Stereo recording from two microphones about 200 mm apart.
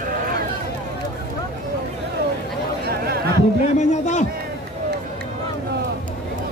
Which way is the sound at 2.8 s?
50° right (ahead or behind).